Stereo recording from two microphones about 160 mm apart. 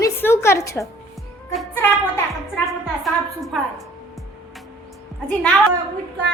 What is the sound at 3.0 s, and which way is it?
Speech, centre (ahead or behind).